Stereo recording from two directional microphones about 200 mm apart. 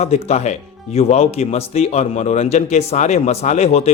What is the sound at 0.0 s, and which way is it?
Speech, 35° left (ahead or behind).